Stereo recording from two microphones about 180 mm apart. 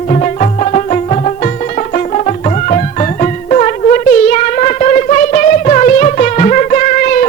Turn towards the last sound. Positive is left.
turn(degrees=50)  # may be behind; listen again after turning